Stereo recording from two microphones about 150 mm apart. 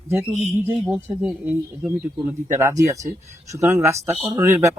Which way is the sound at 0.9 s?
15° right (ahead or behind).